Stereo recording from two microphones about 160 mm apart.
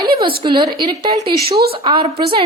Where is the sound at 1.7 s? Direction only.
30° right (ahead or behind).